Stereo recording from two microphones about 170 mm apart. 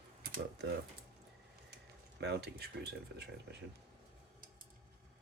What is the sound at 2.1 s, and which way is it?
Speech, 75° right (ahead or behind).